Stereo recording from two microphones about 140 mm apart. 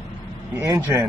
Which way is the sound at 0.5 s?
25° right (ahead or behind).